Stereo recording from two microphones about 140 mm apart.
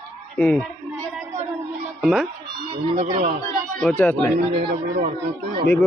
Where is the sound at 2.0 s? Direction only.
5° left (ahead or behind).